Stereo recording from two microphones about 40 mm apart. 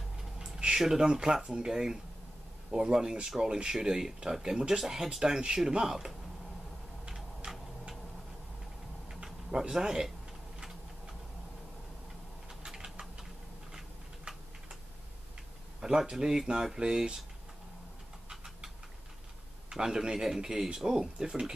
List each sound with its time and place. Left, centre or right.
0.4 s speech: right
7.5 s tick-tock: right
9.1 s speech: centre
12.4 s typing: centre
13.7 s tick-tock: centre
16.0 s speech: centre
18.3 s a sound: centre
19.7 s speech: centre